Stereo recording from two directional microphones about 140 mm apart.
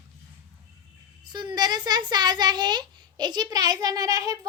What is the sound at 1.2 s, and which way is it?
A child's voice, 30° right (ahead or behind).